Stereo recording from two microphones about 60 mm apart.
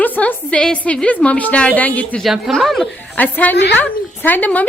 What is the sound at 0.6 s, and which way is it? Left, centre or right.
A woman's voice, centre.